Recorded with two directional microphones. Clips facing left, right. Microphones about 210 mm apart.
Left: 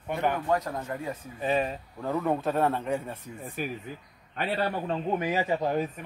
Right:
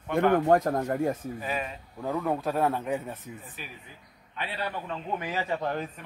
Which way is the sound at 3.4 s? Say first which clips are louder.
Left 11 dB; 45° left (ahead or behind).